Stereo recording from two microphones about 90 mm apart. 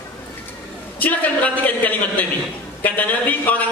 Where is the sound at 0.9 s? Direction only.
20° left (ahead or behind).